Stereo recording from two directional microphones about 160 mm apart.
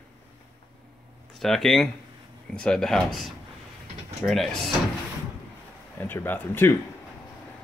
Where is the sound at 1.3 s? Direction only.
Centre (ahead or behind).